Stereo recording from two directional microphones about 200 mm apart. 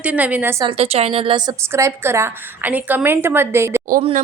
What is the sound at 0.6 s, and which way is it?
Speech, 30° right (ahead or behind).